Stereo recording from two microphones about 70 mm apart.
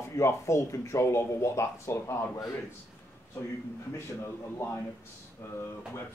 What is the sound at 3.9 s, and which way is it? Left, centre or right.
Speech, left.